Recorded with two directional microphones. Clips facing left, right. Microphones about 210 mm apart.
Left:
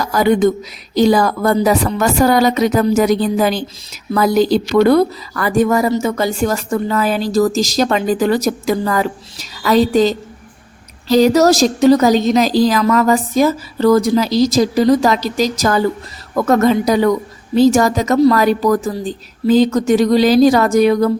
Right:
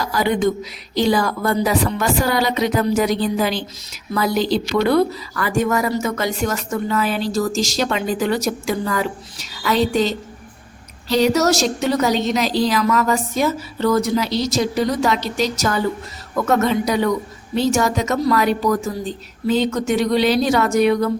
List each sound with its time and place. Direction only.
0.1 s a woman's voice: 45° left (ahead or behind)